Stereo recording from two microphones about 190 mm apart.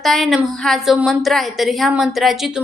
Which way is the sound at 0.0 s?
Centre (ahead or behind).